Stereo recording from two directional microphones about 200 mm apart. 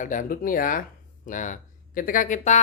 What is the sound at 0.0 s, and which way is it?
Speech, 40° left (ahead or behind).